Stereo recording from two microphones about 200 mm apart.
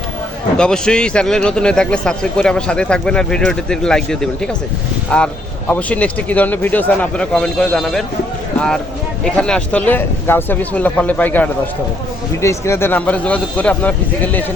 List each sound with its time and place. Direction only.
0.5 s a man's voice: 5° left (ahead or behind)
9.2 s speech: 5° left (ahead or behind)